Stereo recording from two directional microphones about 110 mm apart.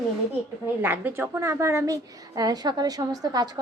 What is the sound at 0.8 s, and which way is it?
A woman's voice, 15° right (ahead or behind).